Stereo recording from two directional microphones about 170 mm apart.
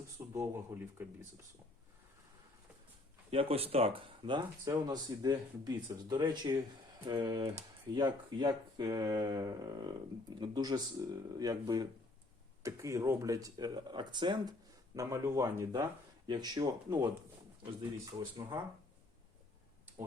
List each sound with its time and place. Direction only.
0.3 s speech: 15° right (ahead or behind)
3.2 s speech: 35° right (ahead or behind)